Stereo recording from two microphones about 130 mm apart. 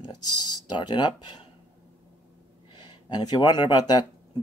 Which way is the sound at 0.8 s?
35° left (ahead or behind).